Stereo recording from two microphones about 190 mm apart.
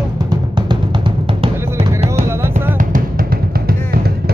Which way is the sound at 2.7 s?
45° right (ahead or behind).